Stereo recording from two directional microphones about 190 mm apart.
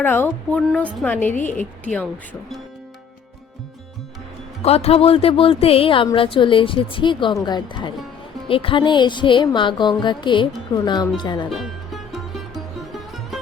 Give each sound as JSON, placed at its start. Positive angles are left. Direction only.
{"t": 0.0, "sound": "a woman's voice", "side_deg": 10}
{"t": 4.6, "sound": "speech", "side_deg": 30}
{"t": 11.4, "sound": "music", "side_deg": 0}